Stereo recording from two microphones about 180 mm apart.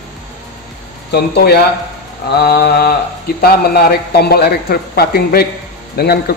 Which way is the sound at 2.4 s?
60° left (ahead or behind).